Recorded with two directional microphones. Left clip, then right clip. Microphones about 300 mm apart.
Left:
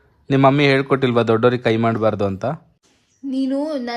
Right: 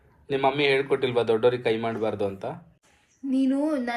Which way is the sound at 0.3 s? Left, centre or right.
Left.